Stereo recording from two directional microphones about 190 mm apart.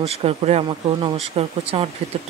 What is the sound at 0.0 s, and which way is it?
Speech, 35° right (ahead or behind).